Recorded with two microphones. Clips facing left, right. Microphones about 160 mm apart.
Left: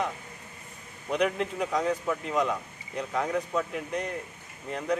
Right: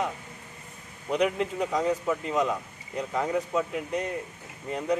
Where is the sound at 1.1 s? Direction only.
Centre (ahead or behind).